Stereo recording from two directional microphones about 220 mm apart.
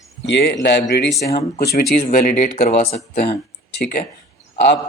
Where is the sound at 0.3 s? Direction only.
55° left (ahead or behind); by 3.0 s 30° left (ahead or behind).